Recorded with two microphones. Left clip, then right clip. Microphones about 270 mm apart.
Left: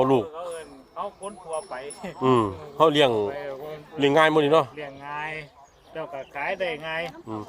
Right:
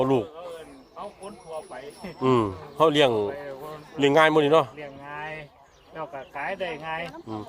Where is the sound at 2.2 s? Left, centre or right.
Centre.